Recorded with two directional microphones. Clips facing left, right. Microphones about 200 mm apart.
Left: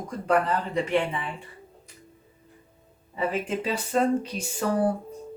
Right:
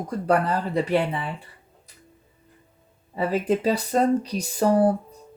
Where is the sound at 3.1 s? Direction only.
35° right (ahead or behind).